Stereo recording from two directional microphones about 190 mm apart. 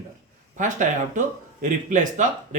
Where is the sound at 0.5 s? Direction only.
40° right (ahead or behind).